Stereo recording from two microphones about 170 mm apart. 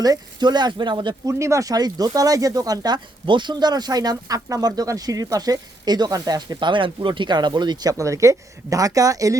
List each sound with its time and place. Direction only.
0.0 s speech: 25° right (ahead or behind)
1.3 s speech: 15° right (ahead or behind)